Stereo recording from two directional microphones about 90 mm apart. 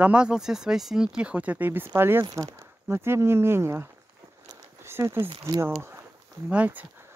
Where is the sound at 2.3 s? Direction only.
40° right (ahead or behind).